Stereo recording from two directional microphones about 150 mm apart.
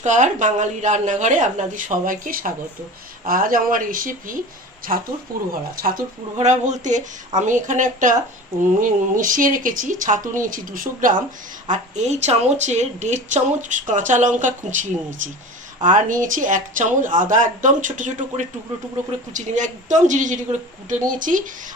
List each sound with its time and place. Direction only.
0.0 s a woman's voice: 55° right (ahead or behind); by 6.0 s 70° right (ahead or behind)
6.3 s speech: 50° right (ahead or behind)
11.7 s speech: 50° right (ahead or behind)